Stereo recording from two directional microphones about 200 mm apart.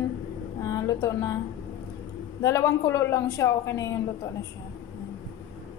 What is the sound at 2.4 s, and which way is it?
A woman's voice, 15° left (ahead or behind).